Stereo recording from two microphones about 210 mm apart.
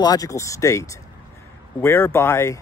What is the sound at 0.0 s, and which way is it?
Speech, 15° left (ahead or behind).